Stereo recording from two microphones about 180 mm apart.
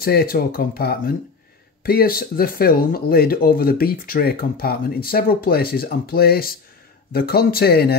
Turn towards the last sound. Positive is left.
turn(degrees=60)  # may be behind; listen again after turning